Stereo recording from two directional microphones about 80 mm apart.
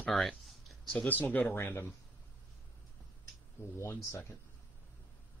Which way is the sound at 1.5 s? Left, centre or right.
Left.